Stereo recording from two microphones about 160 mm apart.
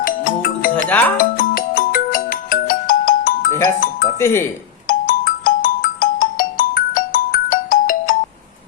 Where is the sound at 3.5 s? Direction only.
15° left (ahead or behind).